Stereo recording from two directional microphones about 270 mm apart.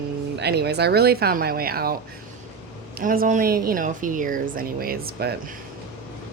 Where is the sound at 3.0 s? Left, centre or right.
Right.